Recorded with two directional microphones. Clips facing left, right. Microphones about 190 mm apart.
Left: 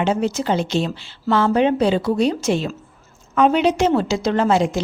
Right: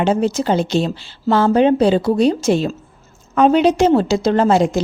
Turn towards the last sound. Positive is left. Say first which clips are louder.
# right 3 dB
turn(degrees=-40)  # may be behind; listen again after turning